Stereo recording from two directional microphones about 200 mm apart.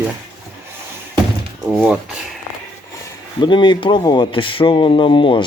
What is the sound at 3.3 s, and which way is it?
Speech, 25° left (ahead or behind).